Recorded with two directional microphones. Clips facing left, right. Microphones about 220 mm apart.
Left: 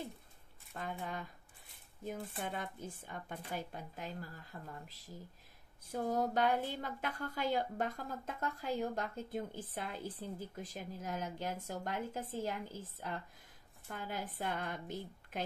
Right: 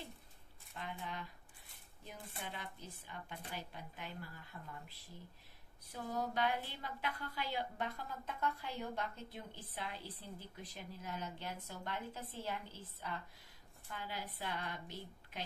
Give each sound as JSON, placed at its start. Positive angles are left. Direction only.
{"t": 0.7, "sound": "a woman's voice", "side_deg": 45}
{"t": 2.4, "sound": "a woman's voice", "side_deg": 50}